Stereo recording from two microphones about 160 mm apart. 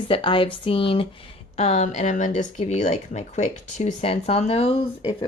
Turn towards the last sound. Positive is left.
turn(degrees=35)  # may be behind; listen again after turning